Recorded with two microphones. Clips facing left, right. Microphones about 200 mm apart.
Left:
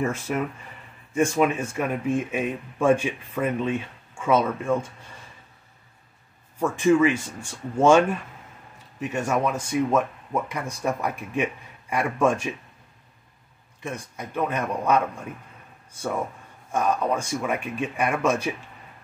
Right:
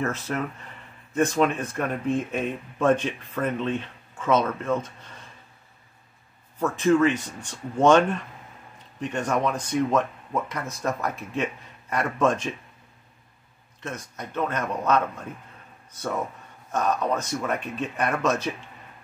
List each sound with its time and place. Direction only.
0.0 s speech: 10° left (ahead or behind)
6.6 s speech: 10° left (ahead or behind)
13.8 s speech: 10° left (ahead or behind)